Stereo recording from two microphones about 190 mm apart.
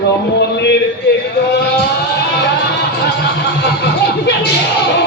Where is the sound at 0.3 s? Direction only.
60° left (ahead or behind).